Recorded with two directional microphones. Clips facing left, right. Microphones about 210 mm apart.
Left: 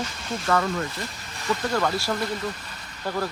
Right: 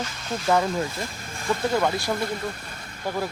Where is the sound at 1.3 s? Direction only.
50° right (ahead or behind).